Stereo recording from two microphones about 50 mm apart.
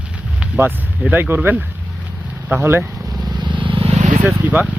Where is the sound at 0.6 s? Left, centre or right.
Right.